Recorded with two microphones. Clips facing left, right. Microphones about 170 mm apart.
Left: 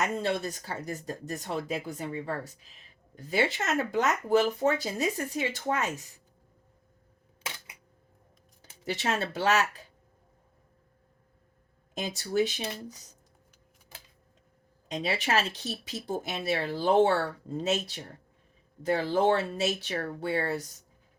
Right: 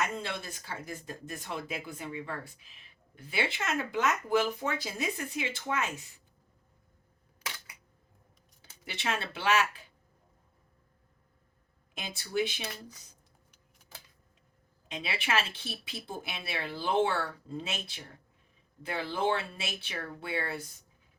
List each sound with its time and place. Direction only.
0.0 s speech: 40° left (ahead or behind)
8.8 s speech: 40° left (ahead or behind)
11.9 s speech: 40° left (ahead or behind)
12.6 s speech: 25° left (ahead or behind)
14.8 s speech: 40° left (ahead or behind)